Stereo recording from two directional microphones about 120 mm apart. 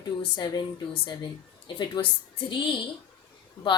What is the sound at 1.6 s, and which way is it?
Speech, 40° left (ahead or behind).